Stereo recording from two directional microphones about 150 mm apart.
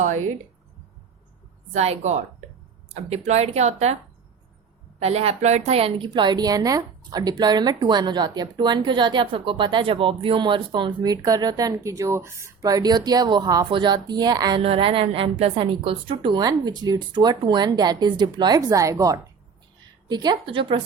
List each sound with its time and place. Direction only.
1.7 s speech: 45° right (ahead or behind)
4.9 s a woman's voice: 45° right (ahead or behind); by 14.6 s 25° right (ahead or behind)
14.6 s a woman's voice: 40° right (ahead or behind)